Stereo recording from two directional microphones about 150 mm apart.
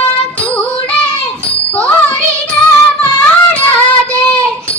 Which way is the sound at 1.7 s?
10° left (ahead or behind).